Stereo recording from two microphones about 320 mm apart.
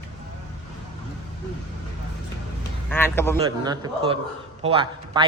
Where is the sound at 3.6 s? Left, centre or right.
Centre.